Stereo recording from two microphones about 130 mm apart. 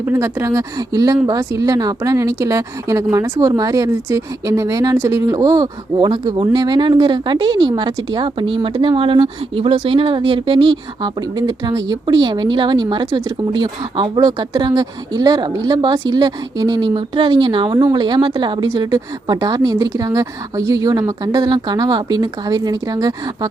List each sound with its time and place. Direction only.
0.0 s a woman's voice: 20° right (ahead or behind)